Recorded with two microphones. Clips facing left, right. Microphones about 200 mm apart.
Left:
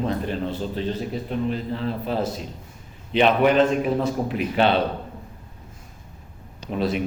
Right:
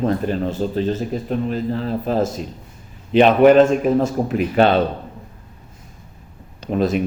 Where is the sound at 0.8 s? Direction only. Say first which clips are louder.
Right 6 dB; 45° right (ahead or behind).